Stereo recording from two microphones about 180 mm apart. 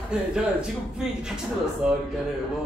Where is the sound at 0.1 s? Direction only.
5° right (ahead or behind).